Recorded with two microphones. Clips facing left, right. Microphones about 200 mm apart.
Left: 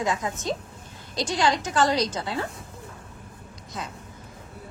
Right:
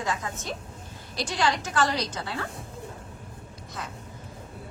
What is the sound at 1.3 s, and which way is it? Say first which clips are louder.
Speech: left 3 dB; 20° left (ahead or behind).